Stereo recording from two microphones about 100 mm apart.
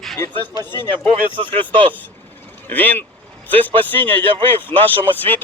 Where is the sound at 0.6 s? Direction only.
25° left (ahead or behind).